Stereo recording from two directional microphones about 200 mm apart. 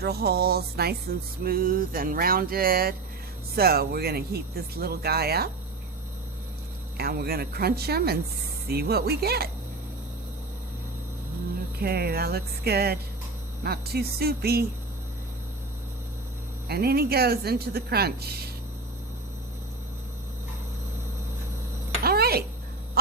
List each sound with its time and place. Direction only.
0.0 s speech: 50° right (ahead or behind)
6.9 s speech: 50° right (ahead or behind)
11.8 s speech: 50° right (ahead or behind)
16.6 s speech: 50° right (ahead or behind)
22.0 s a sound: 50° right (ahead or behind)